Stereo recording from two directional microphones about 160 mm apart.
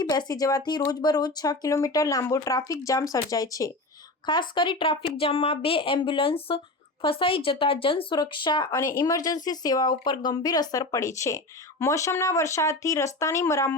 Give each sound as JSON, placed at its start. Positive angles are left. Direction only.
{"t": 0.0, "sound": "a woman's voice", "side_deg": 25}